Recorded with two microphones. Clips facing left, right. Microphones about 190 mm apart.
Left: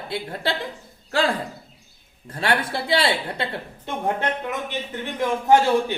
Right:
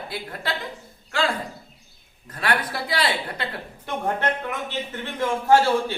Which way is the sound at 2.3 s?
25° left (ahead or behind).